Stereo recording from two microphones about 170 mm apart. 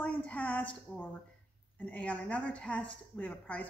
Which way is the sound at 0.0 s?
10° left (ahead or behind).